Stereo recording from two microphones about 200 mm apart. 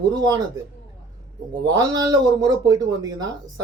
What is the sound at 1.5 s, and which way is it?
Speech, 20° right (ahead or behind).